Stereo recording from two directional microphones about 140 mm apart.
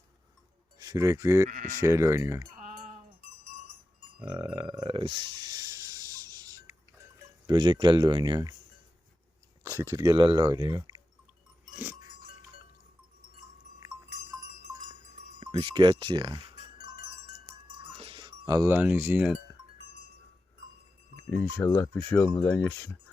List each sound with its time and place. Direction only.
0.8 s speech: 25° right (ahead or behind)
1.5 s speech: 65° right (ahead or behind)
1.8 s speech: 20° right (ahead or behind)
4.2 s speech: 10° right (ahead or behind)
4.9 s a sound: 40° right (ahead or behind)
7.4 s speech: 30° right (ahead or behind)
9.6 s speech: 20° right (ahead or behind)
10.0 s speech: 30° right (ahead or behind)
11.7 s dog: 10° right (ahead or behind)
15.4 s speech: 35° right (ahead or behind)
17.9 s music: 40° right (ahead or behind); by 18.7 s 25° right (ahead or behind)
18.7 s speech: 10° right (ahead or behind)
21.3 s speech: 20° left (ahead or behind)